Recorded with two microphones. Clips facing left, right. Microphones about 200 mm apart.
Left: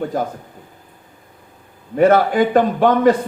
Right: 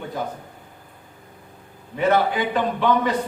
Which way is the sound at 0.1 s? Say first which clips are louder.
Left 5 dB; 45° left (ahead or behind).